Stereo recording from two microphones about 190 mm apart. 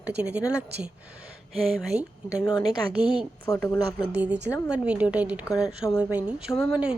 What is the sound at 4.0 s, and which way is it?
Speech, 5° right (ahead or behind).